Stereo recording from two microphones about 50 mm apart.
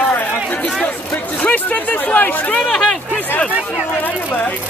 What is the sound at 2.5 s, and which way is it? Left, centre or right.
Speech, centre.